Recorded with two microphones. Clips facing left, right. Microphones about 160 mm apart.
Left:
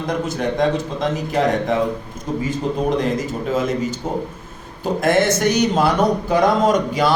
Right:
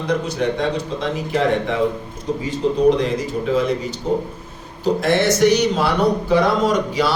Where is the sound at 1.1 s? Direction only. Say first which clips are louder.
Right 1 dB; 45° left (ahead or behind).